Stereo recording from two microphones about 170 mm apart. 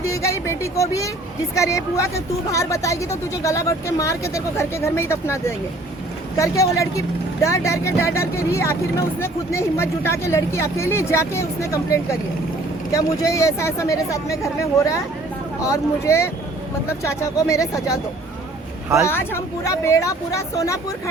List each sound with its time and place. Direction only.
0.0 s speech: 15° left (ahead or behind)
19.0 s speech: 15° left (ahead or behind)